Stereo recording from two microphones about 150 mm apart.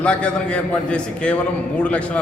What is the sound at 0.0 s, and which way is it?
A man's voice, 5° left (ahead or behind).